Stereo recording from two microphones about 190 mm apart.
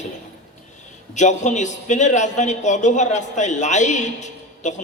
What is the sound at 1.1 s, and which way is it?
A man's voice, 40° left (ahead or behind).